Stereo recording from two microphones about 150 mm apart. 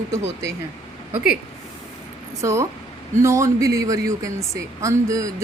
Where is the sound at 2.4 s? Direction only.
20° right (ahead or behind).